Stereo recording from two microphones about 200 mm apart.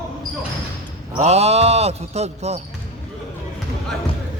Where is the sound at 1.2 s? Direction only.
30° right (ahead or behind).